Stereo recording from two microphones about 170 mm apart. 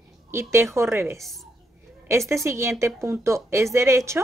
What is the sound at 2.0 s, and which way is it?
A woman's voice, 15° right (ahead or behind).